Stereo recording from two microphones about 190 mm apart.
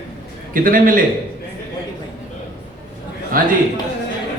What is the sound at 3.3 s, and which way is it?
Speech, 50° right (ahead or behind).